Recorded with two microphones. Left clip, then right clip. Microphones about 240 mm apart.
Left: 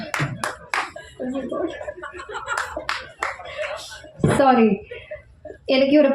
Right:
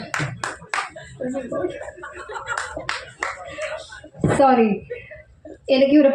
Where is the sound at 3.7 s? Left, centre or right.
Left.